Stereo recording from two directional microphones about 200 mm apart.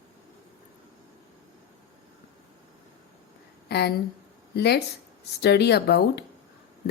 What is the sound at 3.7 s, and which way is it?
Speech, 55° left (ahead or behind).